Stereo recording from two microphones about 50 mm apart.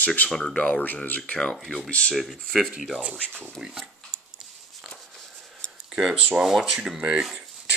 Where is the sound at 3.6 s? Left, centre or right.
Centre.